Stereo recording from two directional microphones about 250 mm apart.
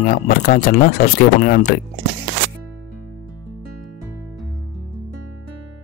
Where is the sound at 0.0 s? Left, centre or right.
Left.